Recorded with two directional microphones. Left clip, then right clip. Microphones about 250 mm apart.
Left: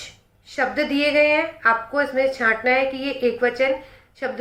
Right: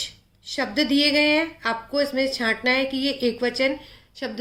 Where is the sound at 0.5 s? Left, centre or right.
Right.